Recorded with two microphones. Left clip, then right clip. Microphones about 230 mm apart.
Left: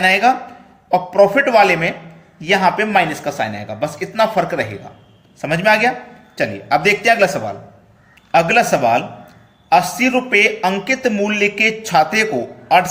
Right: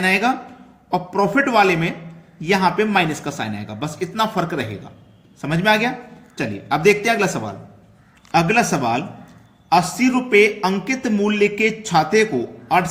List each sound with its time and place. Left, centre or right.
0.0 s speech: right